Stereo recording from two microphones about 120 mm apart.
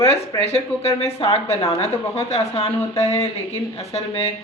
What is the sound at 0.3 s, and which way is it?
Speech, 60° left (ahead or behind).